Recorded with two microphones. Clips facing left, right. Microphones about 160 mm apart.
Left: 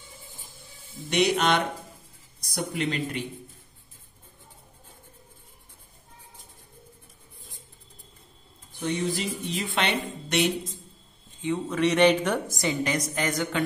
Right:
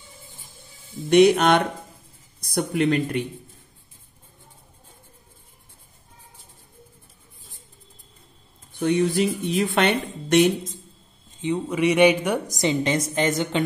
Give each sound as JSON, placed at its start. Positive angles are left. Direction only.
{"t": 1.1, "sound": "speech", "side_deg": -50}
{"t": 8.8, "sound": "speech", "side_deg": -60}
{"t": 11.4, "sound": "a woman's voice", "side_deg": -15}